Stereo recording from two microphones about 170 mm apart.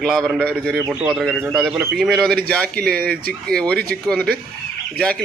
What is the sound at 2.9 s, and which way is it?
Speech, 60° right (ahead or behind).